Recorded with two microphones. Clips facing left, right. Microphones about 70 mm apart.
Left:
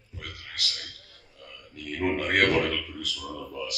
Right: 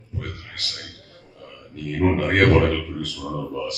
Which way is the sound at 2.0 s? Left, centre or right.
Right.